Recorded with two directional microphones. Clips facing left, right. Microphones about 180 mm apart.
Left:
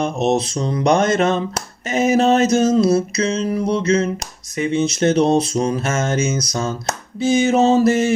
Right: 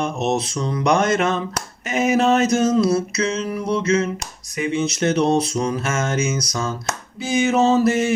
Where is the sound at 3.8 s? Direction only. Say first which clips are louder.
Left 2 dB; 35° left (ahead or behind).